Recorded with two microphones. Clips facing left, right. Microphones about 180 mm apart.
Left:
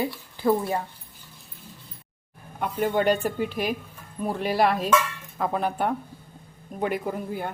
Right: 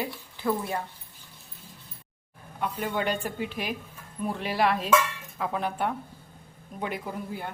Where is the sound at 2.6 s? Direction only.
45° left (ahead or behind).